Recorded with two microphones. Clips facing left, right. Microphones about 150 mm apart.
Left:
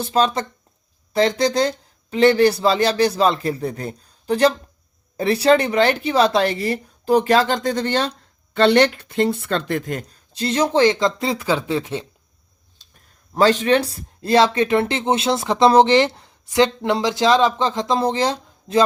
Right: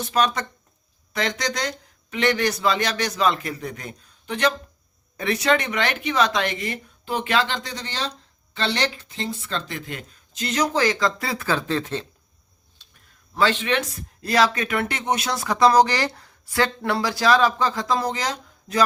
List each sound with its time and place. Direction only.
0.0 s speech: 30° left (ahead or behind); by 12.0 s 10° left (ahead or behind)
13.3 s speech: 40° left (ahead or behind)